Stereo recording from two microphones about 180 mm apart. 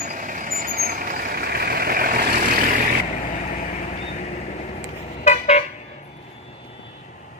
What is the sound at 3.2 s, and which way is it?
Vehicle, 45° left (ahead or behind).